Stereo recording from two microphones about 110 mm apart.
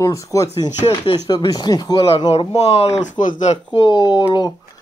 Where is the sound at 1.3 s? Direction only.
40° left (ahead or behind).